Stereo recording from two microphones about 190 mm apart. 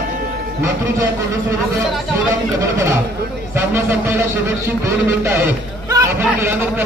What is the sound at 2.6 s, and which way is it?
Speech, 15° right (ahead or behind).